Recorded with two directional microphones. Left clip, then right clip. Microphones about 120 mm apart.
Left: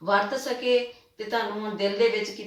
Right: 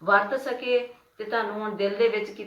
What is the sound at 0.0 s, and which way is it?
Speech, 5° left (ahead or behind).